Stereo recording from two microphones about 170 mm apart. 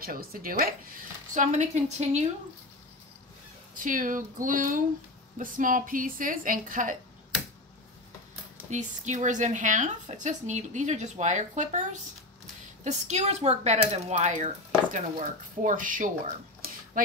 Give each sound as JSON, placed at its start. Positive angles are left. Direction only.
{"t": 0.0, "sound": "speech", "side_deg": -60}
{"t": 3.7, "sound": "speech", "side_deg": -50}
{"t": 8.6, "sound": "speech", "side_deg": -45}
{"t": 17.0, "sound": "a sound", "side_deg": -55}